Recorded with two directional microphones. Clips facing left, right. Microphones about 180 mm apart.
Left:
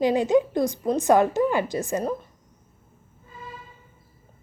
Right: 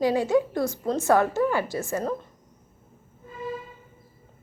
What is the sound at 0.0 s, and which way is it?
A woman's voice, 20° left (ahead or behind).